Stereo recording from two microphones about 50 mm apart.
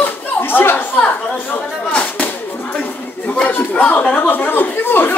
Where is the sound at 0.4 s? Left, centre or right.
Left.